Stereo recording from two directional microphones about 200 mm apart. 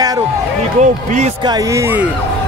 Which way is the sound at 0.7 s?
35° right (ahead or behind).